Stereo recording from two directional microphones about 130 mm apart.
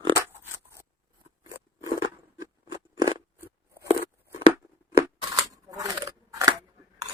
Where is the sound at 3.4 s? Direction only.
20° right (ahead or behind).